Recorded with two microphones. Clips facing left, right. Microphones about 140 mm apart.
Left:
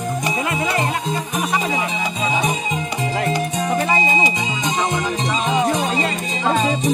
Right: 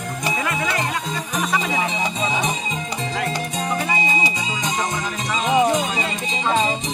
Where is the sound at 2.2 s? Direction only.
10° left (ahead or behind); by 5.5 s 25° left (ahead or behind).